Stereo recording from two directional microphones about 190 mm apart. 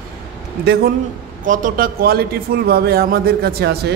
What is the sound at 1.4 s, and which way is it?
A man's voice, 45° right (ahead or behind).